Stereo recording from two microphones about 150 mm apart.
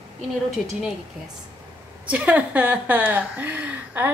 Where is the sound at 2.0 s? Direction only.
10° right (ahead or behind).